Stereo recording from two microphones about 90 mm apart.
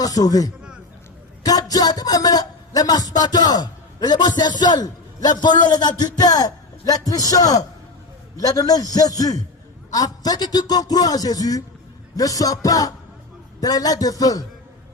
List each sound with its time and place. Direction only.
0.0 s a man's voice: 45° left (ahead or behind)
12.1 s music: 40° left (ahead or behind)
13.6 s a man's voice: 45° left (ahead or behind)